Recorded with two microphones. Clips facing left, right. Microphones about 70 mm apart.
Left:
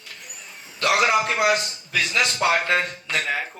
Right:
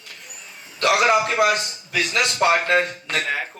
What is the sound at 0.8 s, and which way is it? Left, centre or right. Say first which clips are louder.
Speech: right 2 dB; right.